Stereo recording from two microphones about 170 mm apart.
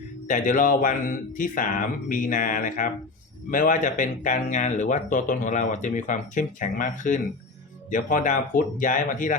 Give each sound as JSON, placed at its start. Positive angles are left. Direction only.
{"t": 0.3, "sound": "speech", "side_deg": 50}